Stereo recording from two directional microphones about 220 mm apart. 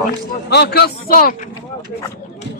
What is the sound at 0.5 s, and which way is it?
Speech, 50° left (ahead or behind).